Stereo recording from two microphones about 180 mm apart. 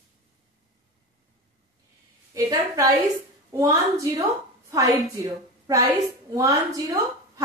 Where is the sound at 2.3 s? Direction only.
20° right (ahead or behind).